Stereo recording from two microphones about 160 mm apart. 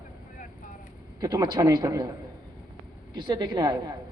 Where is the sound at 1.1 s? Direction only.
25° right (ahead or behind).